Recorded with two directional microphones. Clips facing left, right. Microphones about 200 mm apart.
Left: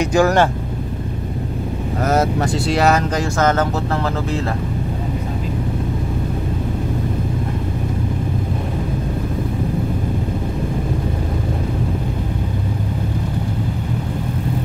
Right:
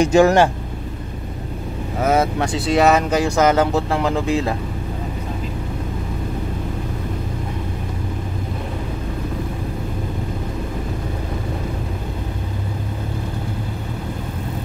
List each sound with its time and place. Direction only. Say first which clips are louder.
0.0 s speech: right 2 dB; 25° right (ahead or behind)
2.0 s speech: even; centre (ahead or behind)